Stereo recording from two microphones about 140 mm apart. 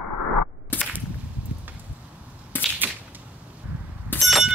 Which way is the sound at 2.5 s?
15° left (ahead or behind).